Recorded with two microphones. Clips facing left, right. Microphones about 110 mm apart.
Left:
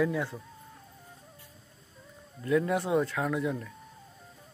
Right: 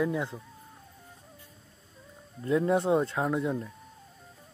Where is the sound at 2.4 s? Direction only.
25° right (ahead or behind).